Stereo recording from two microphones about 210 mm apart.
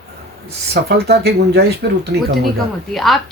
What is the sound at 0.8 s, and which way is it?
Speech, 50° right (ahead or behind).